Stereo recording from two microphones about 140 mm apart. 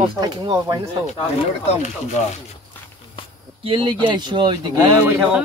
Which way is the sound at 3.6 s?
40° right (ahead or behind).